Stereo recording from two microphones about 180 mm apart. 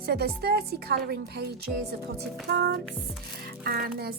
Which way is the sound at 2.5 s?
65° right (ahead or behind).